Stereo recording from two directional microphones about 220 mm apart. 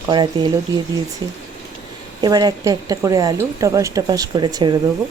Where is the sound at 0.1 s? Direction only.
20° right (ahead or behind).